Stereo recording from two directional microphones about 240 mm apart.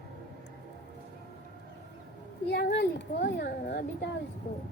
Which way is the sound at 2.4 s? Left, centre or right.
Left.